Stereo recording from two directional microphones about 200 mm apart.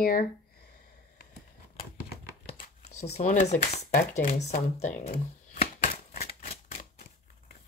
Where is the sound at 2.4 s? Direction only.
30° left (ahead or behind).